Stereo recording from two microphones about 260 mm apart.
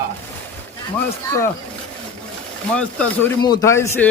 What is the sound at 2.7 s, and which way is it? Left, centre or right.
Speech, centre.